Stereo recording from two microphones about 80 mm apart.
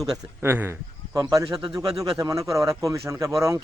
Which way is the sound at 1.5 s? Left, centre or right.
Centre.